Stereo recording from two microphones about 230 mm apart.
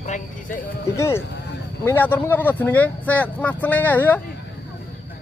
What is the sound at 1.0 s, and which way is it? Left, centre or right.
Speech, centre.